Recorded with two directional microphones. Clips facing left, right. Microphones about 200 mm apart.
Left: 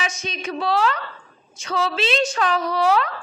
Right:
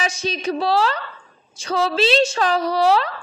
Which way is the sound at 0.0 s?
35° right (ahead or behind).